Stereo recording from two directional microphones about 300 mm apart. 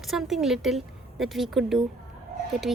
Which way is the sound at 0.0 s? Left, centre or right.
Centre.